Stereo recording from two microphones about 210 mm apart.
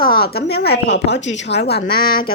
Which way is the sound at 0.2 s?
50° left (ahead or behind).